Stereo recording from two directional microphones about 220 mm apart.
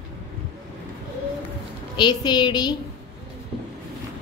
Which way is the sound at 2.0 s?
20° left (ahead or behind).